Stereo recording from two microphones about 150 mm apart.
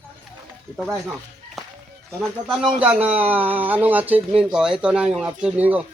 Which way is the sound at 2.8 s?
10° right (ahead or behind).